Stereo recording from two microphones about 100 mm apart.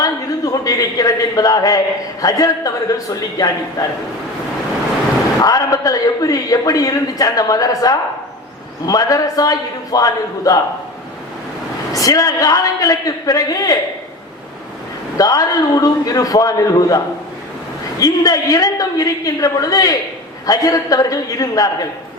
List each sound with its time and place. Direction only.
0.0 s a sound: 35° left (ahead or behind)
2.2 s a man's voice: 35° left (ahead or behind)
5.4 s a man's voice: 35° left (ahead or behind)
11.9 s a man's voice: 35° left (ahead or behind)
15.2 s a man's voice: 40° left (ahead or behind)
18.0 s a man's voice: 40° left (ahead or behind)